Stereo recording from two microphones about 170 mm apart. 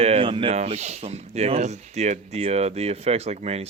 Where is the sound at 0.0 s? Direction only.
35° right (ahead or behind).